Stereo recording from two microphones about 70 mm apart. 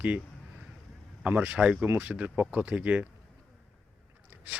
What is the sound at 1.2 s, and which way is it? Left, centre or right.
Speech, right.